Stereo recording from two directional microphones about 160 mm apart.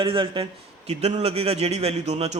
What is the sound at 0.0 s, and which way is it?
A man's voice, 30° right (ahead or behind).